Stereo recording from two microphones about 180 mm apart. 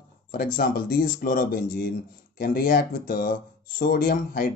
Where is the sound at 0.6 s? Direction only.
55° left (ahead or behind).